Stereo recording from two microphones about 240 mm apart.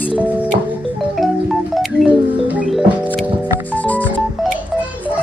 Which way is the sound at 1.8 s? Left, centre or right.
Centre.